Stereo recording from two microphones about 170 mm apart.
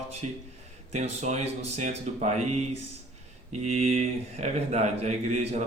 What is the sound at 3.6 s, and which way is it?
Speech, 40° right (ahead or behind).